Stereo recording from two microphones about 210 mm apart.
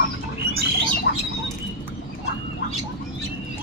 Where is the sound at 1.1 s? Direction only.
50° left (ahead or behind).